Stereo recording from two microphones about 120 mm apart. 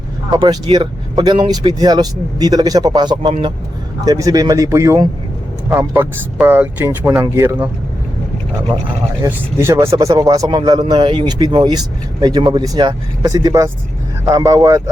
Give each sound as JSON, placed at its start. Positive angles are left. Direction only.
{"t": 0.3, "sound": "speech", "side_deg": -35}
{"t": 9.2, "sound": "speech", "side_deg": -25}